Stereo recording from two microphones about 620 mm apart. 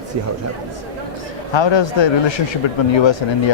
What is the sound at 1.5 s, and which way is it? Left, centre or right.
Speech, left.